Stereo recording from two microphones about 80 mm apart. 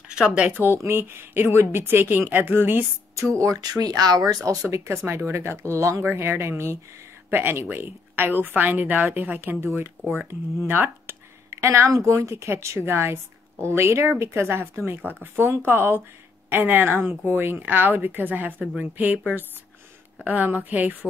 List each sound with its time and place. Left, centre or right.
0.1 s speech: centre
0.8 s a woman's voice: right
3.2 s speech: right
4.6 s a woman's voice: right
11.5 s a woman's voice: right
20.2 s a woman's voice: centre